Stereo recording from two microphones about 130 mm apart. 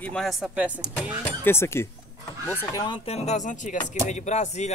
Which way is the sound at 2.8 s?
50° left (ahead or behind).